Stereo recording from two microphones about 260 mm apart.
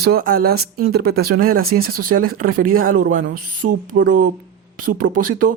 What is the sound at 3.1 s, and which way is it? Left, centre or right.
Speech, right.